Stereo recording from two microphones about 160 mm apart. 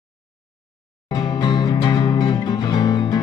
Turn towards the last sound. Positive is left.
turn(degrees=25)  # may be behind; listen again after turning